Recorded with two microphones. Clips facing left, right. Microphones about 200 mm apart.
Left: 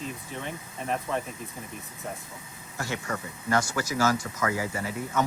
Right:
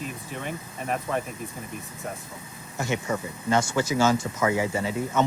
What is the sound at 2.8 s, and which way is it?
Speech, 20° right (ahead or behind).